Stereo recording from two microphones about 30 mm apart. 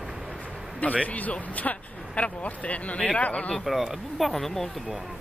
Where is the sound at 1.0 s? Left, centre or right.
Left.